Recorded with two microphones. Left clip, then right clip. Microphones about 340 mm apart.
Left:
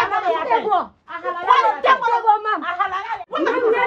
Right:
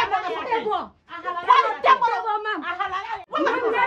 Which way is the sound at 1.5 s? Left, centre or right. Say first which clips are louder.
Left 2 dB; centre.